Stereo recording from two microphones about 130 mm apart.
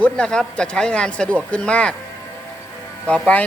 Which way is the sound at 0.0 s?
5° left (ahead or behind).